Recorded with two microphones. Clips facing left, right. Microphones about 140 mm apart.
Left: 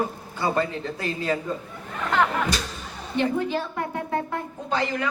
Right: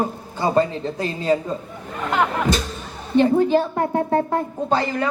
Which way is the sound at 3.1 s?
35° right (ahead or behind).